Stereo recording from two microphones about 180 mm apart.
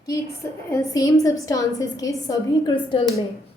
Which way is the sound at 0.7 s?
20° left (ahead or behind).